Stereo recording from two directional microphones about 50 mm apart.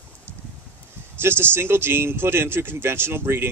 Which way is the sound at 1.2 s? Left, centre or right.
Right.